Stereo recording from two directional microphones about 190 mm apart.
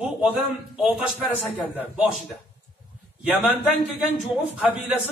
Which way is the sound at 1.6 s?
5° right (ahead or behind).